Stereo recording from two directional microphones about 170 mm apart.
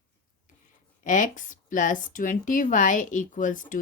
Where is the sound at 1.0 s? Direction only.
50° left (ahead or behind).